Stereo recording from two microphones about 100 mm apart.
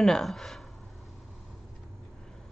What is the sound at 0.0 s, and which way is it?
Speech, 5° left (ahead or behind).